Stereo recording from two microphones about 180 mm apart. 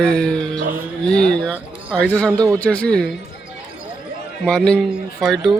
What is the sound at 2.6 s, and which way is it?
Speech, 5° left (ahead or behind).